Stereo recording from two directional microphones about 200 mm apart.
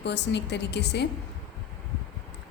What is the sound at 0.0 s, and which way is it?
A woman's voice, 60° left (ahead or behind).